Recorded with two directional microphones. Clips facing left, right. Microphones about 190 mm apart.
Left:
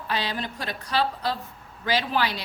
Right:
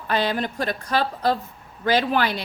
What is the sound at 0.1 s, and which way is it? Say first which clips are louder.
A woman's voice: right 6 dB; 50° right (ahead or behind).